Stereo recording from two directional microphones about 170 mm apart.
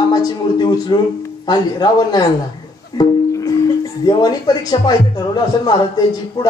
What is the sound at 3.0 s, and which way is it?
Music, 20° left (ahead or behind).